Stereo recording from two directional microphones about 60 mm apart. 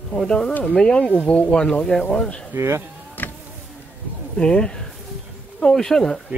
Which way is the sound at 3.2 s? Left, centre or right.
Left.